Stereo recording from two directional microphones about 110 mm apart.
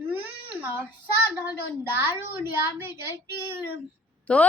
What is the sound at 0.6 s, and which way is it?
Speech, 20° right (ahead or behind).